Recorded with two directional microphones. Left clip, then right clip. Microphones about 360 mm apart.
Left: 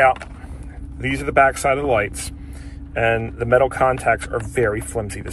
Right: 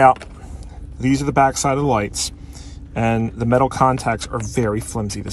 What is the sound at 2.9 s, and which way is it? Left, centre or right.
Speech, right.